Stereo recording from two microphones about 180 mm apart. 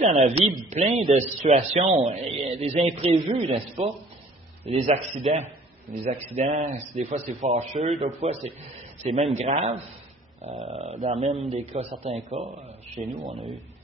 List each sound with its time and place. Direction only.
0.0 s a man's voice: 40° right (ahead or behind)